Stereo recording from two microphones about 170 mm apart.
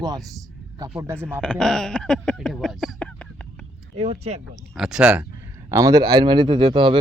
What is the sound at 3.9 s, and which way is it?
Speech, 40° right (ahead or behind).